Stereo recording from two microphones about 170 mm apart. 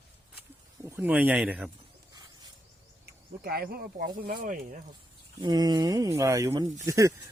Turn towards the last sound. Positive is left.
turn(degrees=-20)  # may be behind; listen again after turning